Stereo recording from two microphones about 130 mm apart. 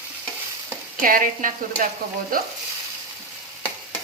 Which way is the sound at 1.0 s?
90° right.